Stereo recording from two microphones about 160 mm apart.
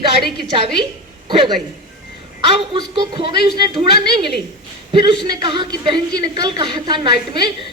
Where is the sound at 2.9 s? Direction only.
30° right (ahead or behind).